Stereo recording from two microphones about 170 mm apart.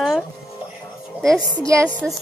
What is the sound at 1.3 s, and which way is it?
Speech, 5° right (ahead or behind).